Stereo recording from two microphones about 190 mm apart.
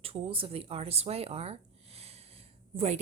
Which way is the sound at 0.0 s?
30° right (ahead or behind).